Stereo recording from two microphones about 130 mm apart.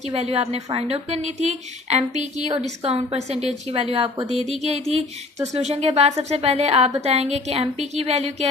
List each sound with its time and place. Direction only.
0.1 s a woman's voice: 50° right (ahead or behind)
2.8 s a woman's voice: 50° right (ahead or behind)
4.6 s a sound: 55° right (ahead or behind)
5.5 s a woman's voice: 55° right (ahead or behind)